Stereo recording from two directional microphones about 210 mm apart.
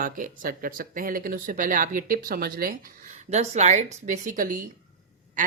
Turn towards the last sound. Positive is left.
turn(degrees=-40)  # may be behind; listen again after turning